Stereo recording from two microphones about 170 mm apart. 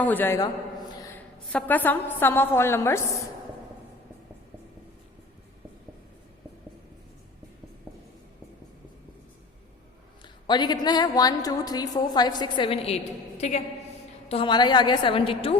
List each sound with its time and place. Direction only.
0.0 s a woman's voice: 10° left (ahead or behind)
1.5 s a woman's voice: 10° left (ahead or behind)
10.4 s a woman's voice: 25° left (ahead or behind)